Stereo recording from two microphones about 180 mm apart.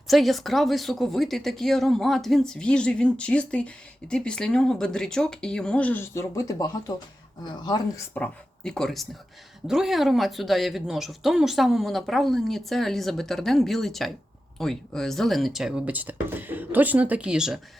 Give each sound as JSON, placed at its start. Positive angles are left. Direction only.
{"t": 0.1, "sound": "speech", "side_deg": 0}
{"t": 8.1, "sound": "speech", "side_deg": 5}